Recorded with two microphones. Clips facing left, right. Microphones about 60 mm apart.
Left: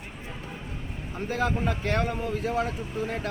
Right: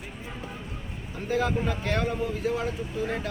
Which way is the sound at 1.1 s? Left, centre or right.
Left.